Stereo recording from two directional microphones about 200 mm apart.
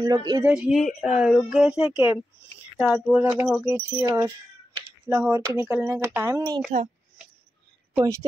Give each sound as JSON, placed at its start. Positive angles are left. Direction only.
{"t": 0.0, "sound": "speech", "side_deg": -20}
{"t": 0.5, "sound": "speech", "side_deg": 0}
{"t": 8.0, "sound": "speech", "side_deg": -15}